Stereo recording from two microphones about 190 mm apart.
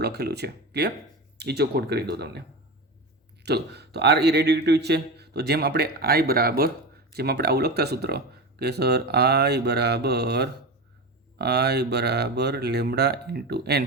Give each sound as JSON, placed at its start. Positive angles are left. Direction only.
{"t": 0.0, "sound": "speech", "side_deg": -60}
{"t": 3.4, "sound": "speech", "side_deg": -60}